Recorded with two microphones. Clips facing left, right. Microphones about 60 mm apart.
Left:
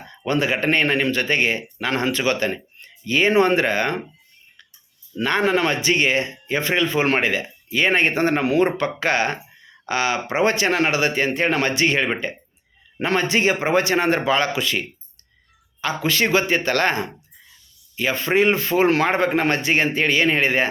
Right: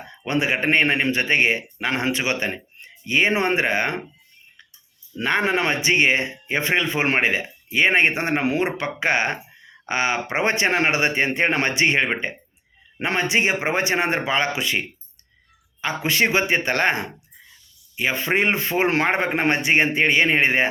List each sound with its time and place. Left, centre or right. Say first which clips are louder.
0.3 s speech: left 1 dB; right
5.1 s speech: left 2 dB; right